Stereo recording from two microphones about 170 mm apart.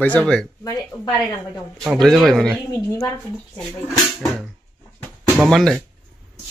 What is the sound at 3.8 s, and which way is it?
Speech, centre (ahead or behind).